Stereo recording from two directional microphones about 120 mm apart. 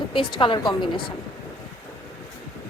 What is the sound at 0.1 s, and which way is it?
Speech, 45° left (ahead or behind).